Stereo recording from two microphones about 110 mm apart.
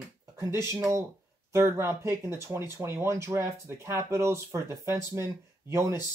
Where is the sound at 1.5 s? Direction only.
25° right (ahead or behind).